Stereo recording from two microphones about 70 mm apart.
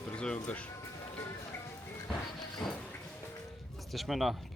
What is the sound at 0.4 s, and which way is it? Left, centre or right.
Speech, centre.